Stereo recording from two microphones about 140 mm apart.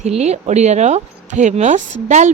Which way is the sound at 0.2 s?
55° right (ahead or behind).